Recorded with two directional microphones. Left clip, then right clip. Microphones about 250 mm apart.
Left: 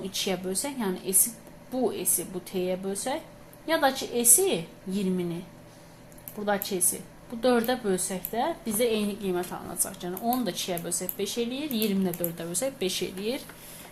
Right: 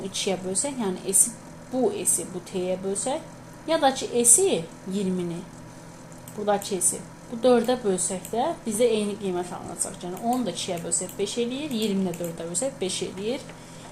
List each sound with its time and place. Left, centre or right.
0.0 s a woman's voice: centre
6.4 s a woman's voice: centre